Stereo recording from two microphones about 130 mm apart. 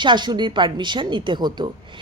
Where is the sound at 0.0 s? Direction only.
35° right (ahead or behind).